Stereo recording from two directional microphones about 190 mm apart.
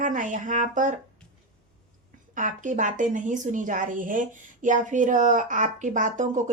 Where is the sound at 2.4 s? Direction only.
40° right (ahead or behind).